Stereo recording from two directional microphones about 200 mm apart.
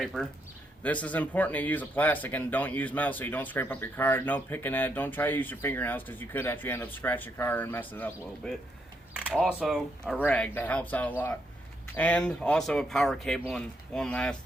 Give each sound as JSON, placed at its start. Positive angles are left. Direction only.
{"t": 0.0, "sound": "speech", "side_deg": 0}
{"t": 9.5, "sound": "speech", "side_deg": -5}